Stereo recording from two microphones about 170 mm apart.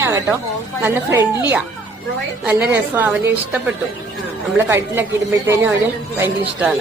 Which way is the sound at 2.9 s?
10° right (ahead or behind).